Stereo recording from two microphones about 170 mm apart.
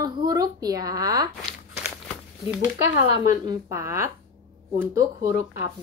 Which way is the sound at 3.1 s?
20° right (ahead or behind).